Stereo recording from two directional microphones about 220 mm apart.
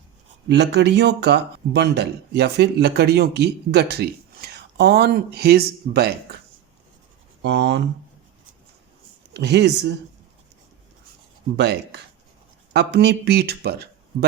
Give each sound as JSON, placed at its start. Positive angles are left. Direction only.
{"t": 0.4, "sound": "speech", "side_deg": -50}
{"t": 7.4, "sound": "speech", "side_deg": -55}
{"t": 9.3, "sound": "speech", "side_deg": -50}
{"t": 11.5, "sound": "speech", "side_deg": -50}